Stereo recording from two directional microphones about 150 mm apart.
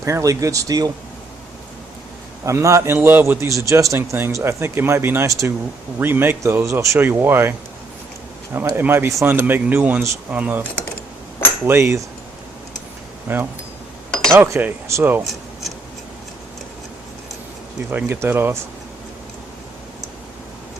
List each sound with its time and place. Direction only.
0.0 s a man's voice: 20° right (ahead or behind)
2.4 s a man's voice: 20° right (ahead or behind)
8.5 s speech: 15° right (ahead or behind)
13.2 s speech: 15° right (ahead or behind)
14.1 s chink: 5° left (ahead or behind)
14.3 s speech: 15° right (ahead or behind)
15.2 s a sound: centre (ahead or behind)
17.9 s speech: 15° right (ahead or behind)